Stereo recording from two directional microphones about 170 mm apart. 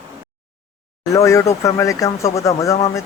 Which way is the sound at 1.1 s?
20° left (ahead or behind).